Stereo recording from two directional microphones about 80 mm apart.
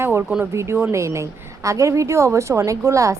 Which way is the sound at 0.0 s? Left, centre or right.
Right.